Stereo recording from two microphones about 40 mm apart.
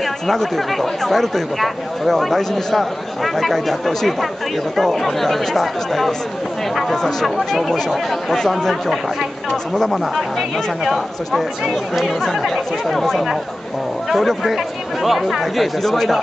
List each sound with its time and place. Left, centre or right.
0.0 s speech: centre
7.2 s speech: centre
10.8 s speech: centre
14.1 s speech: centre